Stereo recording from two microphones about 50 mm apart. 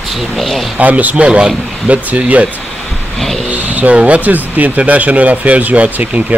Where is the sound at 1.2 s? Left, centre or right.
Centre.